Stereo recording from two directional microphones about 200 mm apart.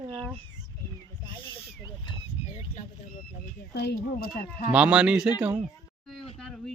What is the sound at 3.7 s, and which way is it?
Speech, 55° left (ahead or behind).